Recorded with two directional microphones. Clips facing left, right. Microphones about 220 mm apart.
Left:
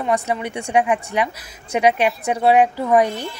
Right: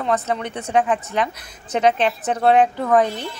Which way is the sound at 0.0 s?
10° left (ahead or behind).